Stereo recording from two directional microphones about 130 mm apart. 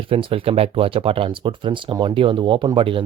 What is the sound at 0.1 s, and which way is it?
Speech, 45° right (ahead or behind).